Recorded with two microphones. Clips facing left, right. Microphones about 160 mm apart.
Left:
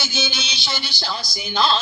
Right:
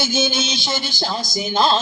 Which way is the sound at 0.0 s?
50° right (ahead or behind).